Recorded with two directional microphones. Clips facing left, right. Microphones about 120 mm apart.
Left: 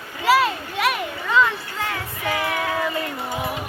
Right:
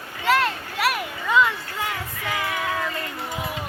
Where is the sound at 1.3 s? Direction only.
15° right (ahead or behind).